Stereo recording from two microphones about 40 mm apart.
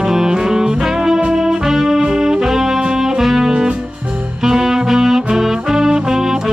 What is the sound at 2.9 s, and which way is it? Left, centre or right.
Music, centre.